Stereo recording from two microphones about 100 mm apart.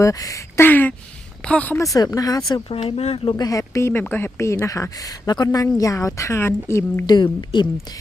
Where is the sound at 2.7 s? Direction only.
75° left (ahead or behind).